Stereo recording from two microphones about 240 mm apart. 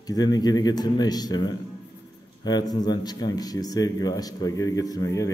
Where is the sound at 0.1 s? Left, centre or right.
Centre.